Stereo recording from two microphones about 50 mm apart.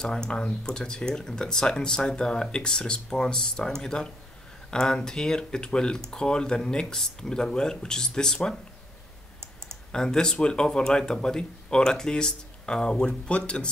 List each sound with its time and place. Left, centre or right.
0.0 s speech: centre
9.9 s speech: centre